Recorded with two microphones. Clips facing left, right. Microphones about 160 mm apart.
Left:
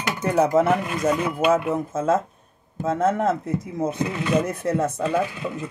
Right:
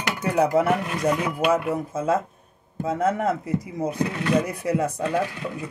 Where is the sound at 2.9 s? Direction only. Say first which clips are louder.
Left 2 dB; 10° right (ahead or behind).